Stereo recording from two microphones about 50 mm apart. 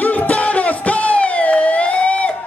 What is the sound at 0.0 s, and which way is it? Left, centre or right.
Music, left.